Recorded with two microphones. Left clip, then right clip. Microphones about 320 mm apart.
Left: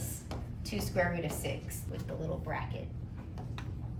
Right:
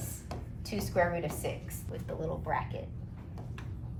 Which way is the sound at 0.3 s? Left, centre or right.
Centre.